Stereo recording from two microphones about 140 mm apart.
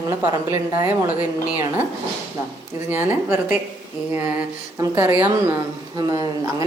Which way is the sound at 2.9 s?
15° right (ahead or behind).